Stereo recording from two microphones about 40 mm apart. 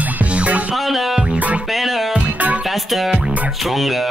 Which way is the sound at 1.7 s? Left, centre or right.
Centre.